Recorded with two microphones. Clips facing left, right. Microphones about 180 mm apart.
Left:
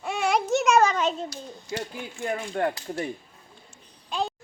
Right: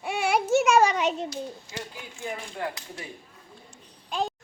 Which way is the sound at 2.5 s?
70° left (ahead or behind).